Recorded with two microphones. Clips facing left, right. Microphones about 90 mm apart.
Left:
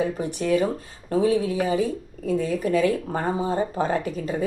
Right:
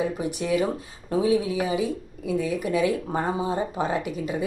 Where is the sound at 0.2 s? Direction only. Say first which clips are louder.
Left 2 dB; 10° right (ahead or behind).